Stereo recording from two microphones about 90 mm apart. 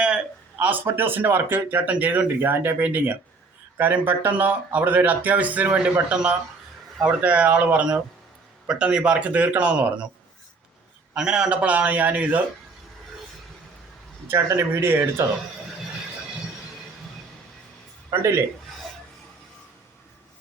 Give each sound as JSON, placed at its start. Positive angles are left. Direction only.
{"t": 0.0, "sound": "speech", "side_deg": -10}
{"t": 11.1, "sound": "speech", "side_deg": -10}
{"t": 14.3, "sound": "speech", "side_deg": -30}
{"t": 18.1, "sound": "speech", "side_deg": -30}